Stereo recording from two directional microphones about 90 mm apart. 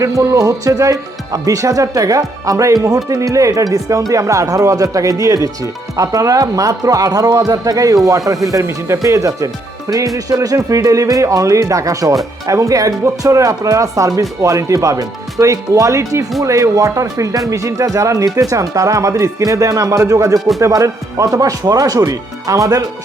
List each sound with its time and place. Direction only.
0.0 s speech: 35° right (ahead or behind)